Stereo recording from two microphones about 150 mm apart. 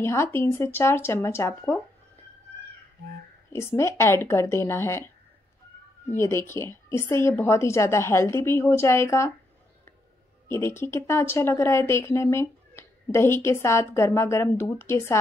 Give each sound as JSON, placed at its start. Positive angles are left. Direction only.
{"t": 0.0, "sound": "speech", "side_deg": 15}
{"t": 3.5, "sound": "speech", "side_deg": 15}
{"t": 10.5, "sound": "speech", "side_deg": 15}